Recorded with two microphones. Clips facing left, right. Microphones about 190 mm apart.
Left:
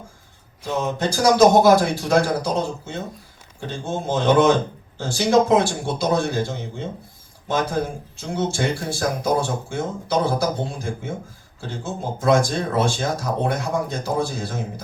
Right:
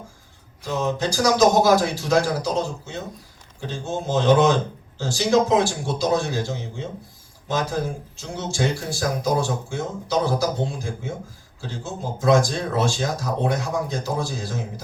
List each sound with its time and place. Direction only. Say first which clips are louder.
0.9 s speech: left 4 dB; 55° left (ahead or behind)